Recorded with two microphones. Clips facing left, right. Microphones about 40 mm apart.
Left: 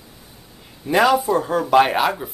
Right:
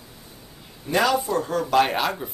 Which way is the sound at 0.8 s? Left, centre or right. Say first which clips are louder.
Left 5 dB; centre.